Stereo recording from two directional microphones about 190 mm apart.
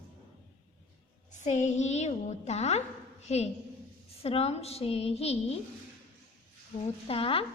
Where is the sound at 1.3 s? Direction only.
40° left (ahead or behind).